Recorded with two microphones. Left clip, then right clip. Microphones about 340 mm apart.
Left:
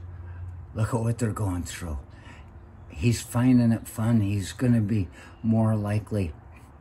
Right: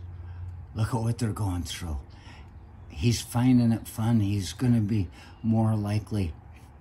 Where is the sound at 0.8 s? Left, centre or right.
Centre.